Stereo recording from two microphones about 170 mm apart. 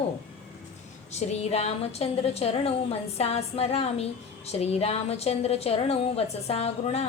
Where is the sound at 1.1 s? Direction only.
40° left (ahead or behind).